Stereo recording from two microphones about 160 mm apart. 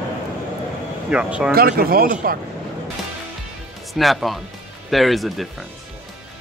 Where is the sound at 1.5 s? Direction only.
70° right (ahead or behind).